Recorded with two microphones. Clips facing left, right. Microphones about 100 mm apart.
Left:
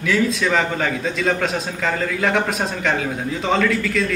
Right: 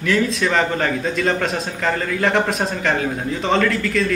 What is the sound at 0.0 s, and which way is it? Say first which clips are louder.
A man's voice: even; centre (ahead or behind).